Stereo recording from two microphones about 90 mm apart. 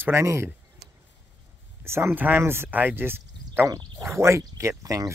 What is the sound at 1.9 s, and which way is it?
Speech, 25° right (ahead or behind).